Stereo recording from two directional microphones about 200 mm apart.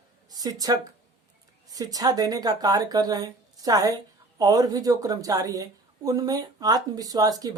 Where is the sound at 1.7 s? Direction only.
20° right (ahead or behind).